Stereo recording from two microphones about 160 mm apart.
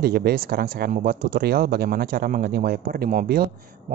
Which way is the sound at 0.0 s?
70° right (ahead or behind).